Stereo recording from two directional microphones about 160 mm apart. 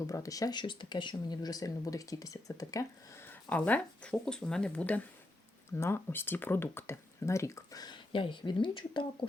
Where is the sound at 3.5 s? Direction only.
10° left (ahead or behind).